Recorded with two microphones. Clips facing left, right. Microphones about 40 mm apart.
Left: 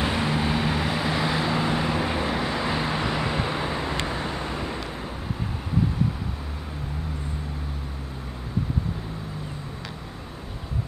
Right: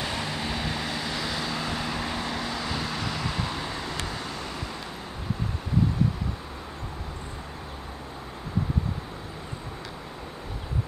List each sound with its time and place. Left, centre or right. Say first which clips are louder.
0.0 s vehicle: left 6 dB; left